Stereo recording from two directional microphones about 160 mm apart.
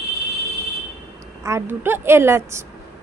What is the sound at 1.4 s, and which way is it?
Speech, 15° right (ahead or behind).